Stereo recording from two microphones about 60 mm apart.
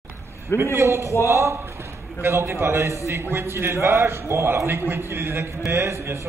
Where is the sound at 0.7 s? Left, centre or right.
Right.